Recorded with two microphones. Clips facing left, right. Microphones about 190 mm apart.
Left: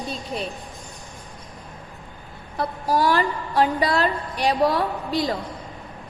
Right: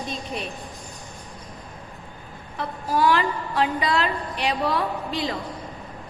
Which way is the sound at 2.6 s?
40° left (ahead or behind).